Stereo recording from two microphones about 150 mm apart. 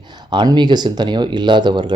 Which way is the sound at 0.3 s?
30° right (ahead or behind).